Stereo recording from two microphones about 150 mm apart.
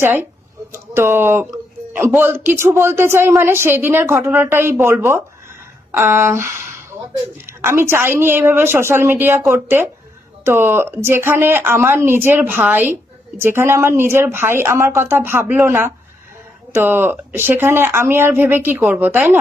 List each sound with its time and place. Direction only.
0.0 s speech: 15° right (ahead or behind)